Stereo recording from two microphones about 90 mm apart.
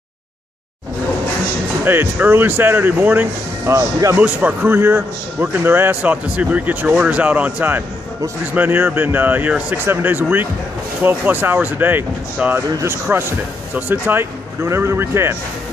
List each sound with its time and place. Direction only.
1.9 s a man's voice: 25° right (ahead or behind)